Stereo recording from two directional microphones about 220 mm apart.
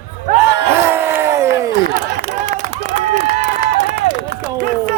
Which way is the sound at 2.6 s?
35° right (ahead or behind).